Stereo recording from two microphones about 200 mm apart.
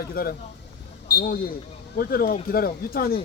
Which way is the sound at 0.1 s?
50° left (ahead or behind).